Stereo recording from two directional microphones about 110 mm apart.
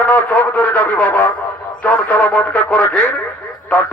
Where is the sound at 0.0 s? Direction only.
15° left (ahead or behind).